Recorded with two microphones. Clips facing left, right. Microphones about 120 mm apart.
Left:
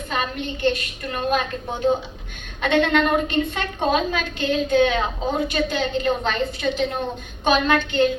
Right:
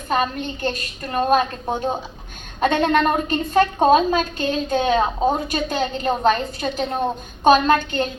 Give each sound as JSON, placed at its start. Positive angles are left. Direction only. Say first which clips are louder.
{"t": 0.1, "sound": "a woman's voice", "louder": "right 5 dB", "side_deg": -40}